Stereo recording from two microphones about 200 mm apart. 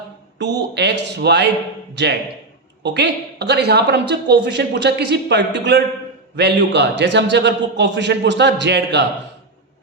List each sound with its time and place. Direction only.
0.3 s a woman's voice: 60° right (ahead or behind)